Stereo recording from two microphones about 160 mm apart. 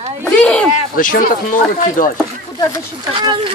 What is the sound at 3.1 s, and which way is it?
Speech, 30° right (ahead or behind).